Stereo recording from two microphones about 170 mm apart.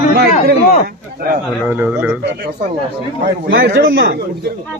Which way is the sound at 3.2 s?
55° right (ahead or behind).